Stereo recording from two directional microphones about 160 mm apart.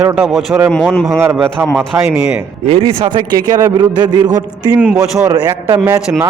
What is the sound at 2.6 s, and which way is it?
A man's voice, 35° right (ahead or behind).